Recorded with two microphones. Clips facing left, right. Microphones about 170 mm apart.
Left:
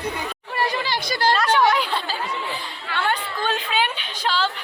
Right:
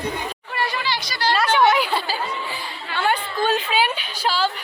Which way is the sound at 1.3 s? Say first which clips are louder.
Right 4 dB; 5° right (ahead or behind).